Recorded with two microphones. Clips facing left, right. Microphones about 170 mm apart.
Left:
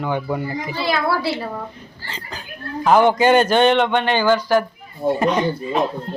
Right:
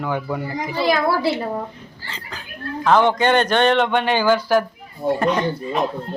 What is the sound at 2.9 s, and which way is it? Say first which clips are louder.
A man's voice: left 2 dB; 10° left (ahead or behind).